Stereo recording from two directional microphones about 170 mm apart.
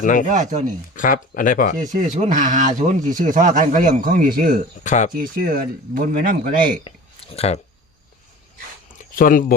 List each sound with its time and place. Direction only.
0.0 s speech: 50° left (ahead or behind)
0.3 s speech: 45° right (ahead or behind)
0.9 s speech: 50° left (ahead or behind)
1.8 s speech: 45° right (ahead or behind)
4.8 s speech: 45° left (ahead or behind)
5.1 s a man's voice: 55° right (ahead or behind)
6.9 s a sound: 35° left (ahead or behind)
7.3 s speech: 40° left (ahead or behind)
8.9 s a sound: 55° left (ahead or behind)